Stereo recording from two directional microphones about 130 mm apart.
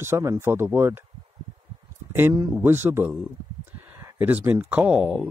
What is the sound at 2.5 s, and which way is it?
Speech, 15° right (ahead or behind).